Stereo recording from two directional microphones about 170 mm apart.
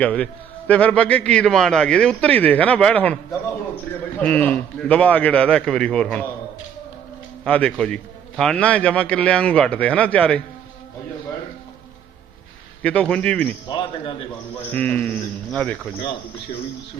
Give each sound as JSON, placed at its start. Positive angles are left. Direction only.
{"t": 0.0, "sound": "a man's voice", "side_deg": 10}
{"t": 4.2, "sound": "a man's voice", "side_deg": 10}
{"t": 7.4, "sound": "a man's voice", "side_deg": 10}
{"t": 12.8, "sound": "a man's voice", "side_deg": 5}
{"t": 13.7, "sound": "a man's voice", "side_deg": 25}
{"t": 14.7, "sound": "a man's voice", "side_deg": 10}